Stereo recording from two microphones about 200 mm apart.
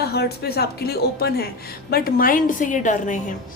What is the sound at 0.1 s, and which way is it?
Speech, 55° left (ahead or behind).